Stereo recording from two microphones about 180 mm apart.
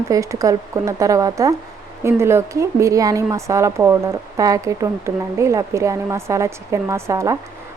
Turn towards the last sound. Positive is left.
turn(degrees=-15)  # may be behind; listen again after turning